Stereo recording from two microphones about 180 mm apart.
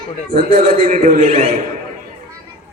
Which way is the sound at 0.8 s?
50° right (ahead or behind).